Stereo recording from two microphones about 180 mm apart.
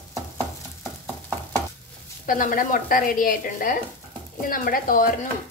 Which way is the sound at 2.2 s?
50° left (ahead or behind).